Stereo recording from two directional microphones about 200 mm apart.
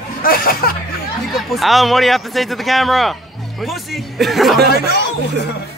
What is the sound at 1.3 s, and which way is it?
Speech, centre (ahead or behind).